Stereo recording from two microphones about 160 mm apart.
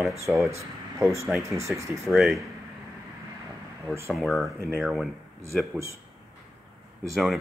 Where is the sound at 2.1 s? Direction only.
Centre (ahead or behind).